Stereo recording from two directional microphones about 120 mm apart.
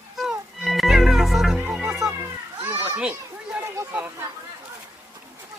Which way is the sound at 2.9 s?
10° right (ahead or behind).